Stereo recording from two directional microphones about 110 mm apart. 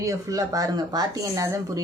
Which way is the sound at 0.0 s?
30° right (ahead or behind).